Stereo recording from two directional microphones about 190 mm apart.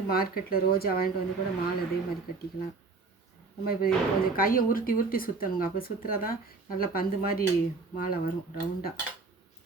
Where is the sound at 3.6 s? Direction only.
55° left (ahead or behind).